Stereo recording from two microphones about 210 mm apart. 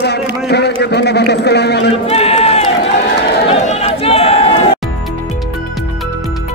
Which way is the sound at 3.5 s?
30° left (ahead or behind).